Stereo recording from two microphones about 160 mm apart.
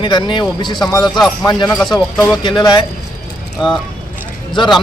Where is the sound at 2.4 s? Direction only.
25° left (ahead or behind).